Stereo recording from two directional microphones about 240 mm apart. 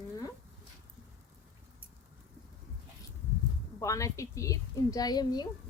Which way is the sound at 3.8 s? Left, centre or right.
Centre.